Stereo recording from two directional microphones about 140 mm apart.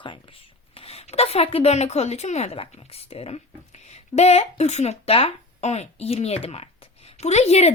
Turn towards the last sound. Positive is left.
turn(degrees=50)  # may be behind; listen again after turning